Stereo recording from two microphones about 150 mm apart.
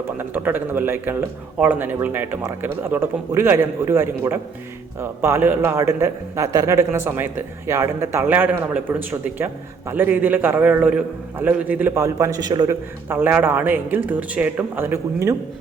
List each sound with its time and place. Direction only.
0.2 s a man's voice: 15° right (ahead or behind)